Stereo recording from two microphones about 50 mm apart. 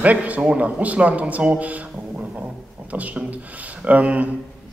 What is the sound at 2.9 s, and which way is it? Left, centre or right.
A man's voice, right.